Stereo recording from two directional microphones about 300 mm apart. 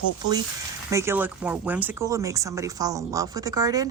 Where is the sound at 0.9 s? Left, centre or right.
Centre.